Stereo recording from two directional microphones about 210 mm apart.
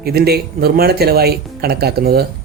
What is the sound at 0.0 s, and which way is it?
Speech, 50° right (ahead or behind).